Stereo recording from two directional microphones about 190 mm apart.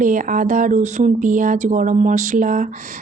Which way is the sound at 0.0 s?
45° right (ahead or behind).